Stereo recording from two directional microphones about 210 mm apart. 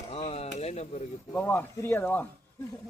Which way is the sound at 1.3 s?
10° left (ahead or behind).